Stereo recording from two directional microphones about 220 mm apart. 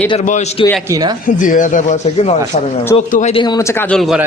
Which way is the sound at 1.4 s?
35° left (ahead or behind).